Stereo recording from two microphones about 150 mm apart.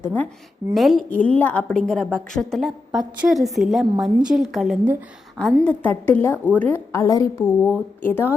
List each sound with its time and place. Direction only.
0.0 s a woman's voice: 10° left (ahead or behind)
0.7 s a woman's voice: centre (ahead or behind)